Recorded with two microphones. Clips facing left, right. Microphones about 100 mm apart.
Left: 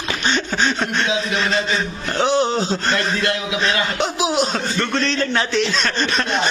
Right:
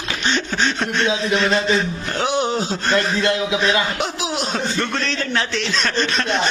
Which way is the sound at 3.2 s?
20° right (ahead or behind).